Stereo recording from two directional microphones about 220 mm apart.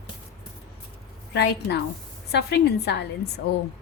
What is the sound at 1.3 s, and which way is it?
A woman's voice, 50° left (ahead or behind).